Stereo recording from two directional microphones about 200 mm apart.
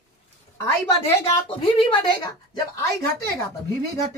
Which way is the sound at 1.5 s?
25° left (ahead or behind).